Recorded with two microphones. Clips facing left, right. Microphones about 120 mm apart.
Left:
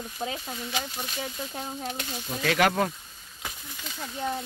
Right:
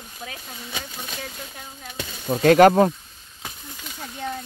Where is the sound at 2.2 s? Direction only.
45° right (ahead or behind).